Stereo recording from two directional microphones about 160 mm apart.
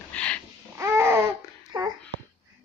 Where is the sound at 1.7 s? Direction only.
25° right (ahead or behind).